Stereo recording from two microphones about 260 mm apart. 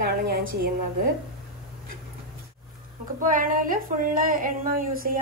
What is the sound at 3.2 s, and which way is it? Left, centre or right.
Child singing, right.